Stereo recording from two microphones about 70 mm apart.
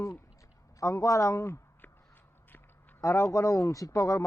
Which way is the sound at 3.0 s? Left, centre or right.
Left.